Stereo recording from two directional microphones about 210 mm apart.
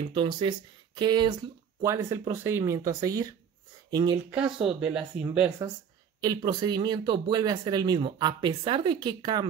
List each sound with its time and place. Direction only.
0.1 s speech: 20° right (ahead or behind)
4.3 s speech: 5° right (ahead or behind)
6.2 s speech: 20° right (ahead or behind)